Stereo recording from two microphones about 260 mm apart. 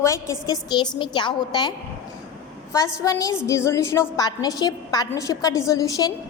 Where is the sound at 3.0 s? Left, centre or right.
Centre.